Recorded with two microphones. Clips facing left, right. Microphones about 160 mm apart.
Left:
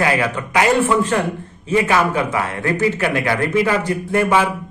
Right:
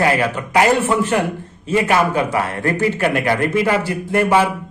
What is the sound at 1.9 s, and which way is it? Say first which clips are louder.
A man's voice: right 1 dB; 30° right (ahead or behind).